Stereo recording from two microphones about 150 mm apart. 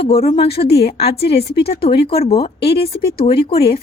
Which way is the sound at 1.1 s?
90° left.